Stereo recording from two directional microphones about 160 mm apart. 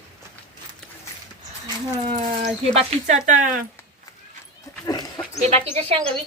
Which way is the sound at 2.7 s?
50° right (ahead or behind).